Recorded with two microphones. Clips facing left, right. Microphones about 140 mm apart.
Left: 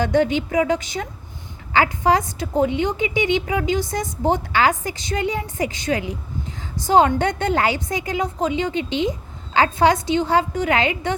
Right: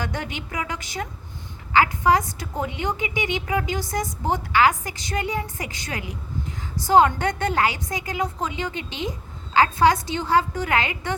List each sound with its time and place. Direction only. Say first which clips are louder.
0.0 s a woman's voice: left 12 dB; 25° left (ahead or behind)